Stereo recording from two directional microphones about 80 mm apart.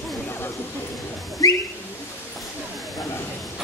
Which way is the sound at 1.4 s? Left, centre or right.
Left.